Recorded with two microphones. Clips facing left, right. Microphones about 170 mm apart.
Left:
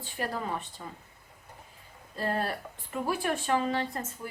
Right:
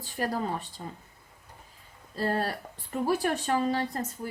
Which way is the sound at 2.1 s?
35° right (ahead or behind).